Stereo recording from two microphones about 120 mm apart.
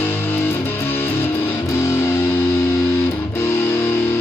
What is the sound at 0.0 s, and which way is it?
Music, 15° left (ahead or behind).